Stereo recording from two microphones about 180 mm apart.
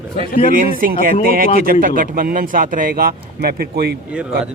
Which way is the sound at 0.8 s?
55° right (ahead or behind).